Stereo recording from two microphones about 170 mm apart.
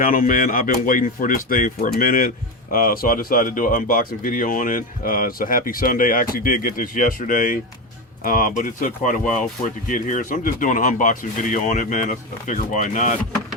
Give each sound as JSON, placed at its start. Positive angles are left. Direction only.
{"t": 0.0, "sound": "speech", "side_deg": 55}